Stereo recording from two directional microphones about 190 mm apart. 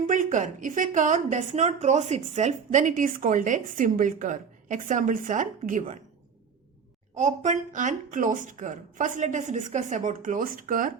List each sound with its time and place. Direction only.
0.1 s a woman's voice: 40° right (ahead or behind)
7.2 s a woman's voice: 40° right (ahead or behind)